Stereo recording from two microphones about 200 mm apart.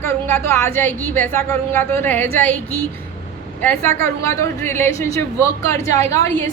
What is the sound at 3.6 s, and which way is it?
A woman's voice, 10° left (ahead or behind).